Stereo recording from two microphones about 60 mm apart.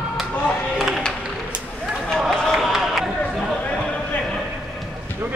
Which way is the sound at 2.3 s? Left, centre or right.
Centre.